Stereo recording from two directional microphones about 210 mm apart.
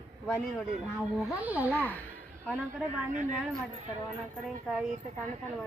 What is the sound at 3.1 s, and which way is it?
Speech, 35° right (ahead or behind).